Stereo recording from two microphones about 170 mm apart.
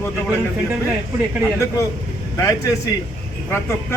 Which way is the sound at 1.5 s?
20° left (ahead or behind).